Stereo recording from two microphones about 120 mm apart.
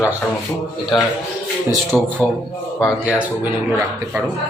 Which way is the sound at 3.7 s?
5° right (ahead or behind).